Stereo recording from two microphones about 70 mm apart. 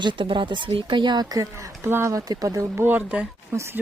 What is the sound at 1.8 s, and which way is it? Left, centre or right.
Speech, right.